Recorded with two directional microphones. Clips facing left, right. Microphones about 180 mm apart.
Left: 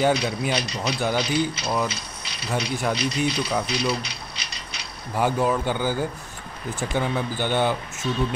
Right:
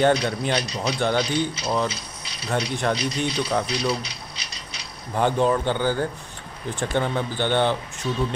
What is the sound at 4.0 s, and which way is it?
Ratchet, 65° left (ahead or behind).